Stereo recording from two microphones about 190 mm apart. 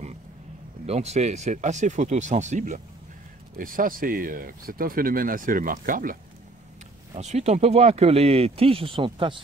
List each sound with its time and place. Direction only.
0.8 s speech: 35° right (ahead or behind)
7.2 s speech: 35° right (ahead or behind)